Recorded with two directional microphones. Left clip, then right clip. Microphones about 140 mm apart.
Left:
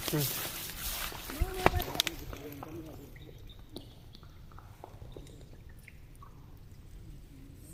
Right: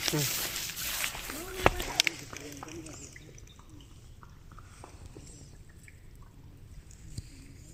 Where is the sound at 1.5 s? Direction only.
70° right (ahead or behind).